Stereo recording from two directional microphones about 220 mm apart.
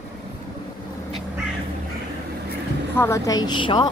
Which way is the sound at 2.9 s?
10° left (ahead or behind).